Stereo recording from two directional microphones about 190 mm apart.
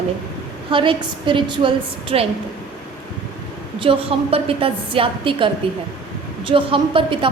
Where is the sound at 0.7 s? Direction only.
25° right (ahead or behind).